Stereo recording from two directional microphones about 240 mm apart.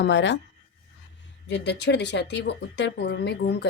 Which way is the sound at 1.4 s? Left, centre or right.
Left.